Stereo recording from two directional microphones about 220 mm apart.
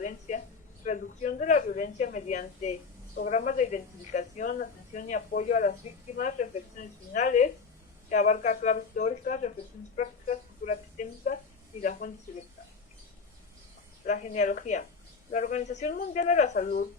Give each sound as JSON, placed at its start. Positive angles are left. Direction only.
{"t": 0.0, "sound": "a sound", "side_deg": 35}
{"t": 0.9, "sound": "speech", "side_deg": 35}
{"t": 14.0, "sound": "speech", "side_deg": 35}